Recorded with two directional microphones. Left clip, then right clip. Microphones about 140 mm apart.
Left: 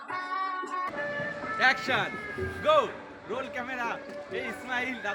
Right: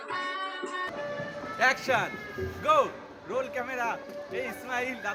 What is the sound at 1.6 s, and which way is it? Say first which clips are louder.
Music: even; 10° right (ahead or behind).